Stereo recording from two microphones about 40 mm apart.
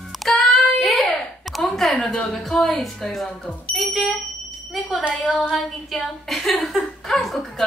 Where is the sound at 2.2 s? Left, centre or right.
Centre.